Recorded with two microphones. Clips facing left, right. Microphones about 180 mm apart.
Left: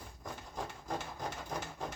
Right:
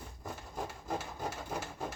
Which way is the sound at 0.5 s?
10° right (ahead or behind).